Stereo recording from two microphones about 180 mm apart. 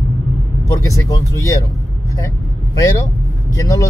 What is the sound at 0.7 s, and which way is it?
Speech, 20° left (ahead or behind).